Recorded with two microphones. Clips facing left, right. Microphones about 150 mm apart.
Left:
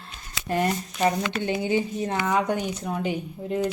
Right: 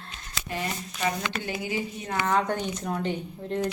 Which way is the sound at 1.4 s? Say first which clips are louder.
Left 6 dB; 25° left (ahead or behind).